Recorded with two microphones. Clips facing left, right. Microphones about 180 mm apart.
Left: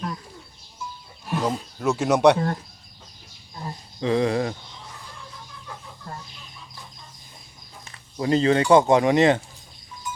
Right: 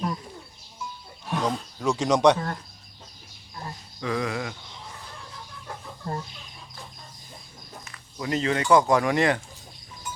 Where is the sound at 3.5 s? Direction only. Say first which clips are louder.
Left 3 dB; 25° left (ahead or behind).